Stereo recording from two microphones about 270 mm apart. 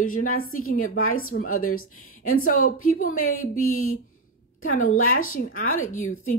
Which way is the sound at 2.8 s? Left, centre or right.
Left.